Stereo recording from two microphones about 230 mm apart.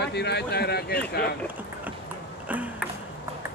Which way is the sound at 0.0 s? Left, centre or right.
Left.